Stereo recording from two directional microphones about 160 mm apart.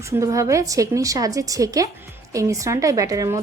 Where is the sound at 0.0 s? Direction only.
20° right (ahead or behind).